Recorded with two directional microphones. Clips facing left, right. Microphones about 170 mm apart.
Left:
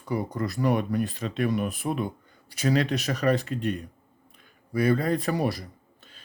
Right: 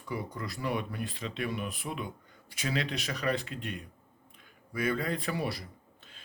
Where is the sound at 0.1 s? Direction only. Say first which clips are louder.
Left 8 dB; 40° left (ahead or behind).